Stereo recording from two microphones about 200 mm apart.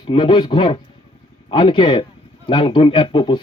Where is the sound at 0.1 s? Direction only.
25° left (ahead or behind).